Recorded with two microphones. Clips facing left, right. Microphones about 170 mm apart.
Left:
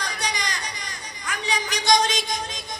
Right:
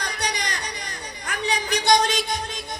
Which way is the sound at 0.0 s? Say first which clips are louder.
Right 1 dB; 60° right (ahead or behind).